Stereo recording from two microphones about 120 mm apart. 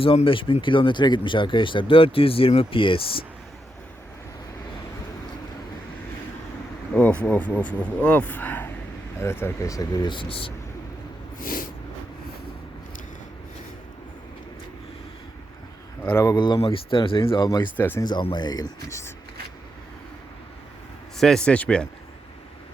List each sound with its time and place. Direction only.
0.0 s speech: 50° left (ahead or behind)
6.9 s speech: 10° left (ahead or behind); by 10.5 s 50° left (ahead or behind)
16.0 s speech: 20° left (ahead or behind)
16.3 s speech: 40° left (ahead or behind)
16.6 s speech: 50° left (ahead or behind)
17.7 s speech: 15° left (ahead or behind)
18.0 s speech: 40° left (ahead or behind)
21.2 s speech: 5° left (ahead or behind)